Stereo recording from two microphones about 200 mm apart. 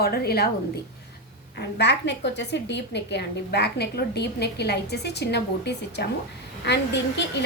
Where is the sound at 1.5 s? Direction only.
60° left (ahead or behind).